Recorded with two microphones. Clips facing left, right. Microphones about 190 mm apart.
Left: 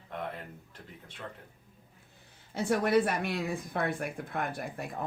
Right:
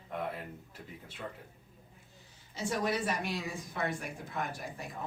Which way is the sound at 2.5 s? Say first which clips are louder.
Left 7 dB; 60° left (ahead or behind).